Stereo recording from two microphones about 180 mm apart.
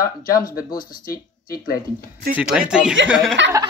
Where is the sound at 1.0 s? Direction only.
55° left (ahead or behind).